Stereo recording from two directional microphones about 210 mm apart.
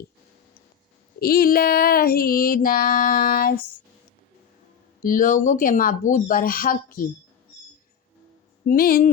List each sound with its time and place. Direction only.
1.2 s female singing: 45° left (ahead or behind)
5.0 s speech: 40° left (ahead or behind)
8.6 s speech: 45° left (ahead or behind)